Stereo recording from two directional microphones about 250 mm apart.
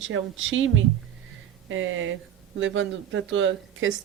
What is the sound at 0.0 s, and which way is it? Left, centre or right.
Speech, right.